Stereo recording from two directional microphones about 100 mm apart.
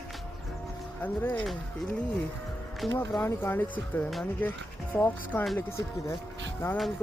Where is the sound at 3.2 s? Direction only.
20° left (ahead or behind).